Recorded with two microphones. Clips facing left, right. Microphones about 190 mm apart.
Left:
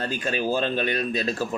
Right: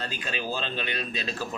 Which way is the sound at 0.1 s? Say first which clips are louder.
Left 7 dB; 45° left (ahead or behind).